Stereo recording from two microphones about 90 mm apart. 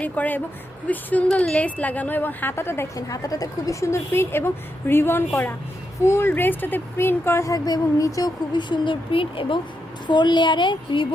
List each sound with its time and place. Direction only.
0.0 s a woman's voice: 20° left (ahead or behind)
2.9 s a woman's voice: 40° left (ahead or behind)
8.5 s speech: 60° left (ahead or behind); by 9.6 s 75° left (ahead or behind)
10.1 s a woman's voice: 60° left (ahead or behind)